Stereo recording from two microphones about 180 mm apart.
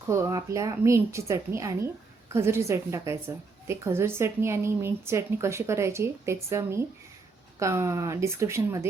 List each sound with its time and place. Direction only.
0.1 s a woman's voice: 15° right (ahead or behind)